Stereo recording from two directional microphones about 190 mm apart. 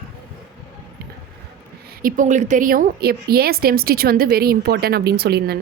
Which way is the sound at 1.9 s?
45° right (ahead or behind).